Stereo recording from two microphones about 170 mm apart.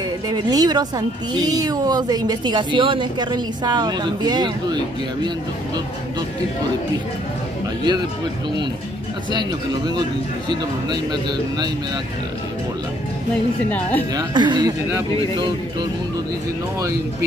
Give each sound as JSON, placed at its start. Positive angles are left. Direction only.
{"t": 0.3, "sound": "speech", "side_deg": -25}
{"t": 9.3, "sound": "speech", "side_deg": -25}
{"t": 13.7, "sound": "a woman's voice", "side_deg": 10}
{"t": 14.1, "sound": "speech", "side_deg": -25}